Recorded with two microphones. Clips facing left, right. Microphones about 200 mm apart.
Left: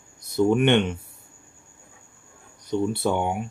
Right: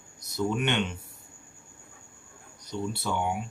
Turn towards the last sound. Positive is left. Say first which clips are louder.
# left 6 dB
turn(degrees=55)  # may be behind; listen again after turning